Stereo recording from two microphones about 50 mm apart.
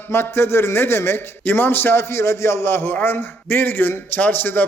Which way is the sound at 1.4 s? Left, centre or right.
Left.